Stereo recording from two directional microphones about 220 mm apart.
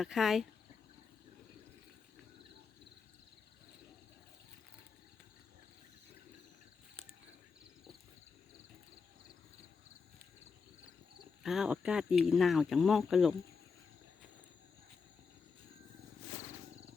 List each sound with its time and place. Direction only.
0.0 s speech: centre (ahead or behind)
11.4 s speech: centre (ahead or behind)